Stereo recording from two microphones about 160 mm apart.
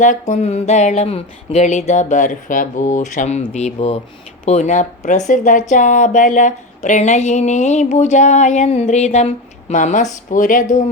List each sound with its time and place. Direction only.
0.0 s speech: 50° left (ahead or behind)